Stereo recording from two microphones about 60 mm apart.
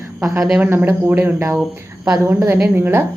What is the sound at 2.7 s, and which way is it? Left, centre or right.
Speech, right.